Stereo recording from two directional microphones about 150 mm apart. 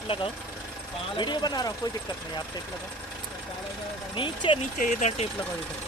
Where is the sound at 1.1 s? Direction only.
30° left (ahead or behind).